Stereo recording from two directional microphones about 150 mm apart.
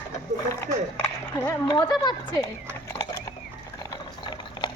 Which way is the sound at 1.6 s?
30° left (ahead or behind).